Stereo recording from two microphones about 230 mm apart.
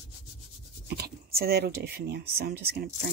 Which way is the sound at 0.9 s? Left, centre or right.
Right.